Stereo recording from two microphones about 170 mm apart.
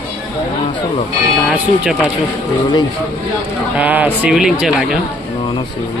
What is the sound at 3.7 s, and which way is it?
Speech, 10° right (ahead or behind).